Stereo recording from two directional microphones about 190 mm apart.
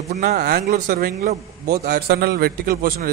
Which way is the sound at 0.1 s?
50° right (ahead or behind).